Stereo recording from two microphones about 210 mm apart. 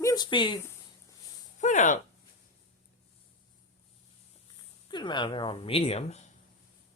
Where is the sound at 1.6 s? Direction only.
35° left (ahead or behind).